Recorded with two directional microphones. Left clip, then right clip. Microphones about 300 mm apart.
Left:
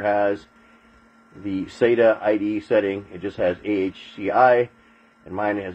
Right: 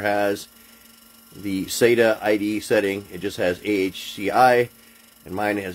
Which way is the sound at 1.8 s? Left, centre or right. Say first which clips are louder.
Even; right.